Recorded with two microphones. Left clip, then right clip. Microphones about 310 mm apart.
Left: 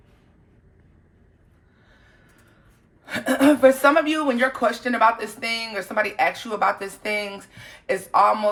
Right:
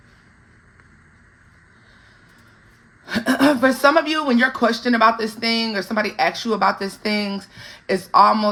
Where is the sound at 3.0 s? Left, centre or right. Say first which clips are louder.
Right 2 dB; right.